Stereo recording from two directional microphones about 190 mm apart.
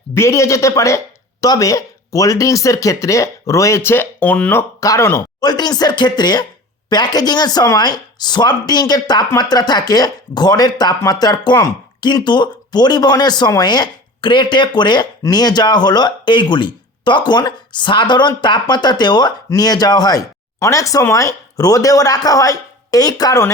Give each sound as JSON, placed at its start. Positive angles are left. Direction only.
{"t": 0.1, "sound": "speech", "side_deg": 15}